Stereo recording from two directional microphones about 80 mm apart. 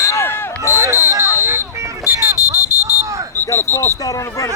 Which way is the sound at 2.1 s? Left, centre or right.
Left.